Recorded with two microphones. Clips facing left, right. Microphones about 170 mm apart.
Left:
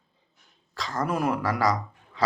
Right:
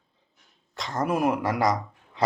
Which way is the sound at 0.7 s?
20° right (ahead or behind).